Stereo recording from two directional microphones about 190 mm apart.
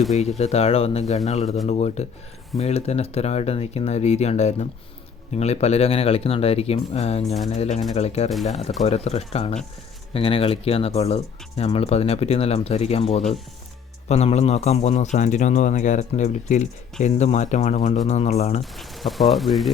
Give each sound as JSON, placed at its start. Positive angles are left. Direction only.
{"t": 0.2, "sound": "speech", "side_deg": 35}
{"t": 18.6, "sound": "speech", "side_deg": 0}